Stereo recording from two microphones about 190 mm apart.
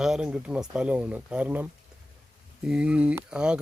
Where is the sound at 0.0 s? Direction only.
5° right (ahead or behind).